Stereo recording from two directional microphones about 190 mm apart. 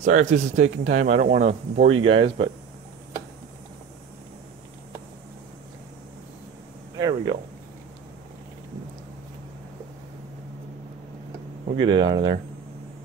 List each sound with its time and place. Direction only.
0.0 s speech: 40° right (ahead or behind)
7.0 s speech: 20° right (ahead or behind)
11.8 s speech: 25° right (ahead or behind)